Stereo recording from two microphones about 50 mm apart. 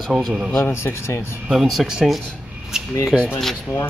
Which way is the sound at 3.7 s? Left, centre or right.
Left.